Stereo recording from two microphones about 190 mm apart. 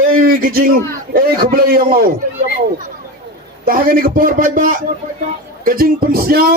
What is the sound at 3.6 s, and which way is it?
A man's voice, 50° right (ahead or behind).